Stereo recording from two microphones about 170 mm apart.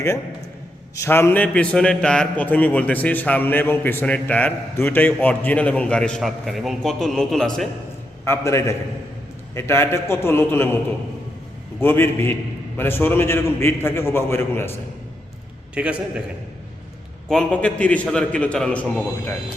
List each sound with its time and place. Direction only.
0.9 s a man's voice: 15° left (ahead or behind)
8.2 s a man's voice: 15° left (ahead or behind)
11.8 s a man's voice: 10° left (ahead or behind)
15.7 s a man's voice: 5° right (ahead or behind)
17.2 s a man's voice: 5° left (ahead or behind)